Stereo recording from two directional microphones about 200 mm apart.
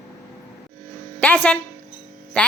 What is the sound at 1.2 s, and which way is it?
Speech, 5° left (ahead or behind).